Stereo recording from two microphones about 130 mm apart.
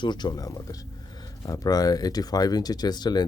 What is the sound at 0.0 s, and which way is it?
Speech, 35° left (ahead or behind).